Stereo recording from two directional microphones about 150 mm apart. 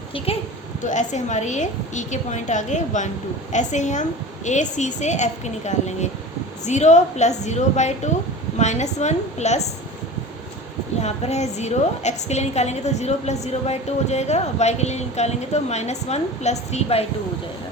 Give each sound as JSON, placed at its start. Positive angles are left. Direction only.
{"t": 0.9, "sound": "a woman's voice", "side_deg": 50}
{"t": 11.0, "sound": "a woman's voice", "side_deg": 45}